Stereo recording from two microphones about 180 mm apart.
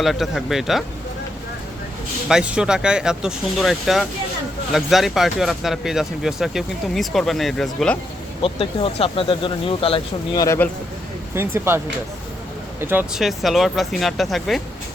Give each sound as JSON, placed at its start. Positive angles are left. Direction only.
{"t": 0.0, "sound": "speech", "side_deg": 0}
{"t": 2.3, "sound": "speech", "side_deg": -5}
{"t": 8.4, "sound": "speech", "side_deg": 30}
{"t": 10.4, "sound": "speech", "side_deg": 15}
{"t": 11.3, "sound": "speech", "side_deg": -15}
{"t": 12.8, "sound": "speech", "side_deg": -10}